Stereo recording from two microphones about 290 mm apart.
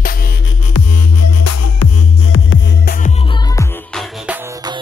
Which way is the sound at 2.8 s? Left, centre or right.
Left.